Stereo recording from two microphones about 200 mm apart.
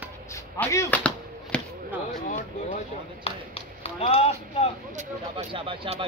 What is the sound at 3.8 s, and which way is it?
Speech, 30° left (ahead or behind).